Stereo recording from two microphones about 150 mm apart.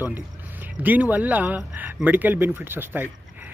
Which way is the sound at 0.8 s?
10° right (ahead or behind).